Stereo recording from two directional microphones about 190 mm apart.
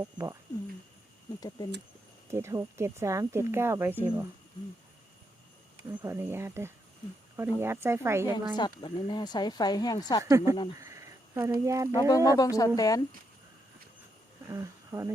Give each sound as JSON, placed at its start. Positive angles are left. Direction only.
{"t": 0.0, "sound": "speech", "side_deg": -15}
{"t": 1.4, "sound": "speech", "side_deg": 20}
{"t": 2.3, "sound": "speech", "side_deg": -15}
{"t": 5.9, "sound": "speech", "side_deg": -10}
{"t": 8.5, "sound": "speech", "side_deg": 25}
{"t": 10.2, "sound": "speech", "side_deg": -15}
{"t": 10.8, "sound": "a sound", "side_deg": -15}
{"t": 11.6, "sound": "speech", "side_deg": -15}
{"t": 11.9, "sound": "speech", "side_deg": 20}
{"t": 14.4, "sound": "speech", "side_deg": -15}